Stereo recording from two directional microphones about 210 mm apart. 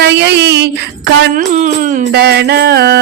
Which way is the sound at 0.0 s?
55° right (ahead or behind).